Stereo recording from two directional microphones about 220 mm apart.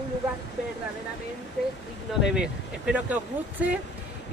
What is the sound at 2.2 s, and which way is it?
Speech, 5° right (ahead or behind).